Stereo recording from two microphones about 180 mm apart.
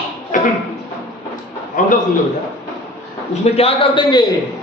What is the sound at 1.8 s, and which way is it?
Speech, 45° left (ahead or behind).